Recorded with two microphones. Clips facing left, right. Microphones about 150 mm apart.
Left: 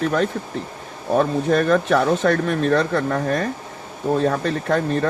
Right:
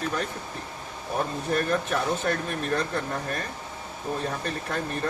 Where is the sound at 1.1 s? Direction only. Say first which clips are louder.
Left 9 dB; 90° left.